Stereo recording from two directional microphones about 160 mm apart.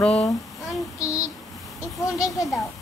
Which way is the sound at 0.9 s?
20° left (ahead or behind).